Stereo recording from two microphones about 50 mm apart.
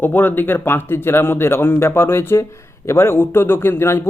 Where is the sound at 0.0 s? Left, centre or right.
Left.